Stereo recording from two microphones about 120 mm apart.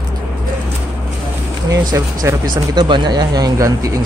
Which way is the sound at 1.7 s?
30° right (ahead or behind).